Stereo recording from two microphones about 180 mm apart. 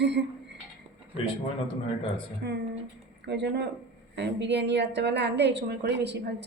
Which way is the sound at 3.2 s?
75° right (ahead or behind).